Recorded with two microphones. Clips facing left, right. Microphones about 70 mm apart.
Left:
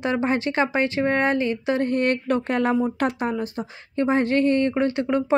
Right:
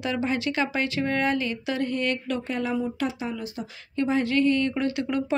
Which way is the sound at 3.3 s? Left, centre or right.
Left.